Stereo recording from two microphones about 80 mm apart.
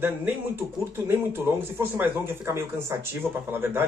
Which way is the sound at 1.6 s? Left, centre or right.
Right.